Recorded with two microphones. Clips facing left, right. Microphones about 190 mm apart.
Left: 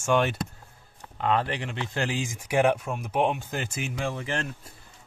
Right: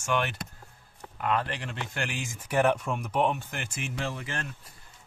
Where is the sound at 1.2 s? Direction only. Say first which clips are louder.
Left 3 dB; 30° left (ahead or behind).